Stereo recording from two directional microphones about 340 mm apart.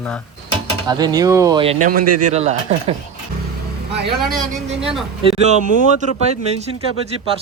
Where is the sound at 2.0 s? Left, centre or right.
Right.